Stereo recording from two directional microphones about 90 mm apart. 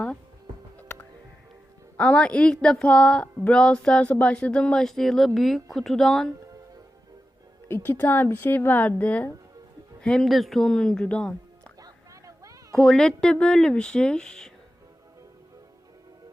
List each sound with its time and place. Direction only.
2.0 s speech: 10° left (ahead or behind)
8.0 s a woman's voice: 20° left (ahead or behind)
11.8 s vehicle: 40° right (ahead or behind)
12.7 s speech: 5° left (ahead or behind)